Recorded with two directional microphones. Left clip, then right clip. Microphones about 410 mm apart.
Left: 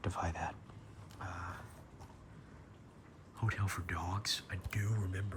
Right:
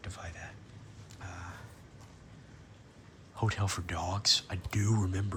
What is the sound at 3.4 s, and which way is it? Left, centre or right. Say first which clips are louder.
Speech: right 5 dB; centre.